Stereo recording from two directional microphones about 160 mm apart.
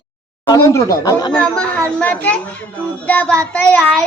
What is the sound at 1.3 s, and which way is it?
A child's voice, 5° left (ahead or behind).